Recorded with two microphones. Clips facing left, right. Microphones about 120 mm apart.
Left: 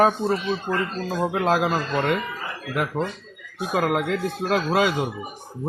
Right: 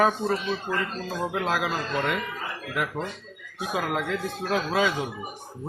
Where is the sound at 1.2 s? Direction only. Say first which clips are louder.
Left 6 dB; 45° left (ahead or behind).